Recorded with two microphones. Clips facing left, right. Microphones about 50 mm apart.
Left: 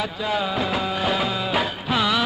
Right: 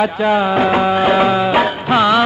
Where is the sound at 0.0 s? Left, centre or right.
Right.